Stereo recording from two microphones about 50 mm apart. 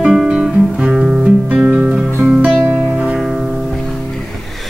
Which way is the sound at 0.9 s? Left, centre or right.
Centre.